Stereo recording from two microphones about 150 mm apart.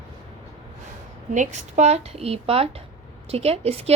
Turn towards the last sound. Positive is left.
turn(degrees=-40)  # may be behind; listen again after turning